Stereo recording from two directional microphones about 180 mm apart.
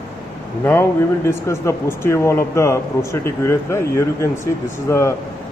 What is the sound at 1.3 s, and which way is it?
A man's voice, 15° left (ahead or behind).